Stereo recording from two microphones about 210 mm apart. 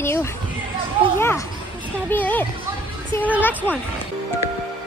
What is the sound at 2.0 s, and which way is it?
Speech, 10° left (ahead or behind).